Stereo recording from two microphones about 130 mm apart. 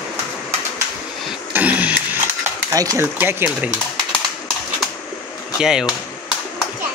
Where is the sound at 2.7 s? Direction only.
25° right (ahead or behind).